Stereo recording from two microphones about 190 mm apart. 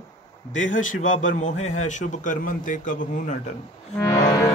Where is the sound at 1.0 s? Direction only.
40° left (ahead or behind).